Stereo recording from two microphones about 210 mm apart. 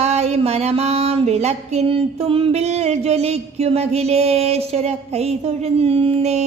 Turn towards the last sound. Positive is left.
turn(degrees=-30)  # may be behind; listen again after turning